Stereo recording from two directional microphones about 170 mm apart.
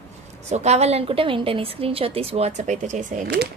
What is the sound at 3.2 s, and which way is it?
Speech, 70° right (ahead or behind).